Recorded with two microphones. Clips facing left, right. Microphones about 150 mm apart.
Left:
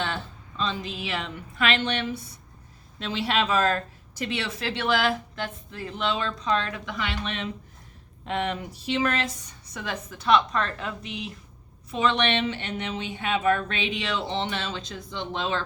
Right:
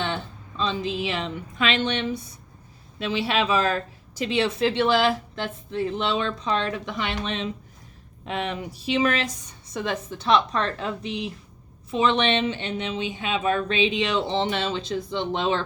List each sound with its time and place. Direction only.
0.6 s speech: 20° right (ahead or behind)
3.1 s speech: 15° right (ahead or behind)
9.7 s speech: 25° right (ahead or behind)